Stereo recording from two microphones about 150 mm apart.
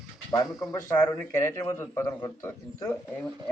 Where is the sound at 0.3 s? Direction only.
25° left (ahead or behind).